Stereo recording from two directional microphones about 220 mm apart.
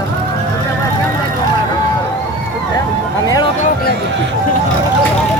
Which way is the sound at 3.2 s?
15° left (ahead or behind).